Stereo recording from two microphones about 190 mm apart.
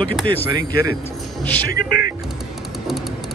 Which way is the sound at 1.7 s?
50° left (ahead or behind).